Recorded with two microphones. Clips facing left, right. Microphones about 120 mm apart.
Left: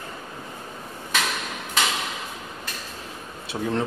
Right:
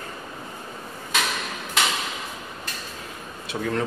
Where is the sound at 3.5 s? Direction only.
15° left (ahead or behind).